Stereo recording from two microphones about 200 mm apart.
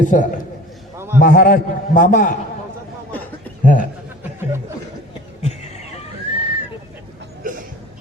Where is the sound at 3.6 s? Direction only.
40° left (ahead or behind).